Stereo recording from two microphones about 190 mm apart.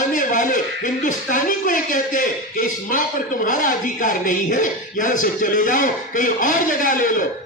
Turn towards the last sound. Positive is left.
turn(degrees=45)  # may be behind; listen again after turning